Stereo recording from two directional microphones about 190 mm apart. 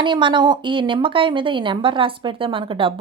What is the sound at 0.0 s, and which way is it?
Speech, 25° right (ahead or behind).